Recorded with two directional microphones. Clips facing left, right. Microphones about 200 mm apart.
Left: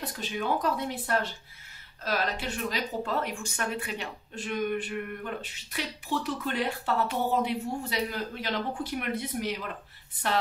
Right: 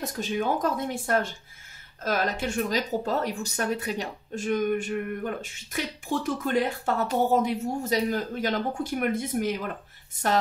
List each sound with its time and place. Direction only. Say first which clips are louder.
0.0 s speech: right 5 dB; 45° right (ahead or behind)